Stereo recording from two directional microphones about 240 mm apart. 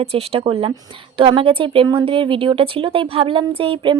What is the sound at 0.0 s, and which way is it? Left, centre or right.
A woman's voice, right.